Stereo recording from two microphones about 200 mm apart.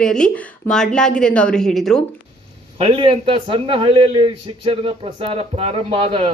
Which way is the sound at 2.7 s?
25° right (ahead or behind).